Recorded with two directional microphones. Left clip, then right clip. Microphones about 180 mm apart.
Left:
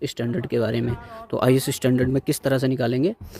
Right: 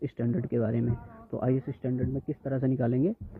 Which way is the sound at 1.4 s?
70° left (ahead or behind).